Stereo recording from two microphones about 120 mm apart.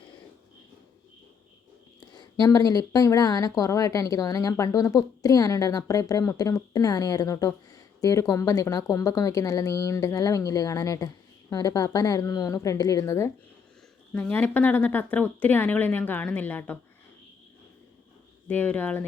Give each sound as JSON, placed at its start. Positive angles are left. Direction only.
{"t": 2.0, "sound": "speech", "side_deg": 40}
{"t": 14.1, "sound": "speech", "side_deg": 10}
{"t": 18.4, "sound": "speech", "side_deg": 15}